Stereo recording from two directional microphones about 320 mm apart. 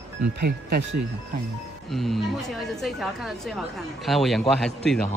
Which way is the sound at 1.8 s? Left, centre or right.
Centre.